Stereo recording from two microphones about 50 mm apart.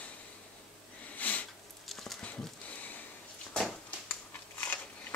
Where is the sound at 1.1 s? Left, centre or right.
Left.